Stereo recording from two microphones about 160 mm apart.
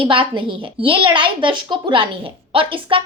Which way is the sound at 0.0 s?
30° right (ahead or behind).